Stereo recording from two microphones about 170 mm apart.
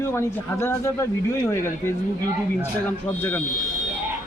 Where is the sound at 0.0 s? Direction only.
15° left (ahead or behind).